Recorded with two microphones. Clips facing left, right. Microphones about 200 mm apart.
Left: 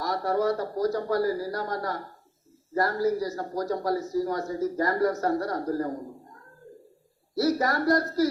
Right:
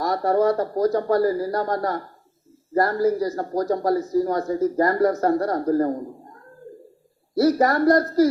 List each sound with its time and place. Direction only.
0.0 s a man's voice: 50° right (ahead or behind)
7.3 s a man's voice: 50° right (ahead or behind)